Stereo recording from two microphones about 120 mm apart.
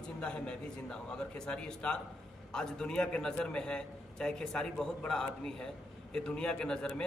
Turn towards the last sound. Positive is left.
turn(degrees=5)  # may be behind; listen again after turning